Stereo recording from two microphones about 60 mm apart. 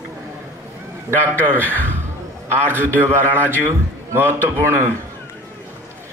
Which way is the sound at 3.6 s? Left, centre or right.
Right.